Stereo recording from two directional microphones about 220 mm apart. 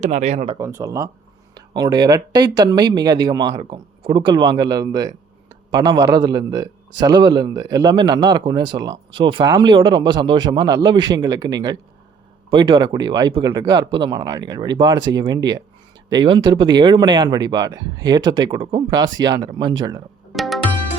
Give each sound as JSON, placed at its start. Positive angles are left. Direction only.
{"t": 0.0, "sound": "speech", "side_deg": -30}
{"t": 0.6, "sound": "speech", "side_deg": -15}
{"t": 20.3, "sound": "music", "side_deg": 0}